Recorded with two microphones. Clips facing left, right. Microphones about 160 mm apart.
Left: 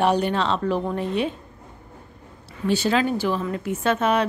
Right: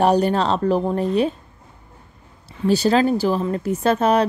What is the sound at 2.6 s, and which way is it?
A woman's voice, 35° right (ahead or behind).